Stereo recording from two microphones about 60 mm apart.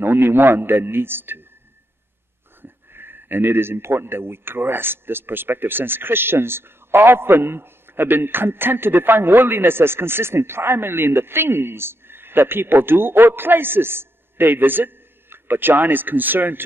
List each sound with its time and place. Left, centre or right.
0.0 s speech: right
2.6 s speech: right